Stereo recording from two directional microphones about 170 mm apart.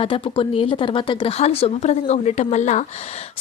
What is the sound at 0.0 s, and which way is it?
A woman's voice, 30° left (ahead or behind).